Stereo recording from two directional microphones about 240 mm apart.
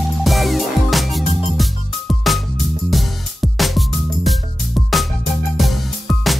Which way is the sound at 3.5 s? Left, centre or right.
Centre.